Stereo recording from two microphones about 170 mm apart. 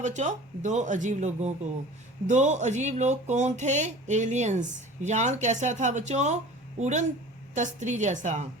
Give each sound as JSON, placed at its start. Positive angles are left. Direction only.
{"t": 0.0, "sound": "speech", "side_deg": -45}